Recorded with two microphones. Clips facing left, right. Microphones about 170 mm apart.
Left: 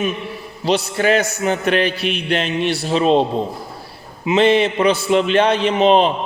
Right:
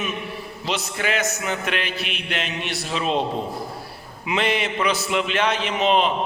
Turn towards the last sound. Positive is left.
turn(degrees=35)  # may be behind; listen again after turning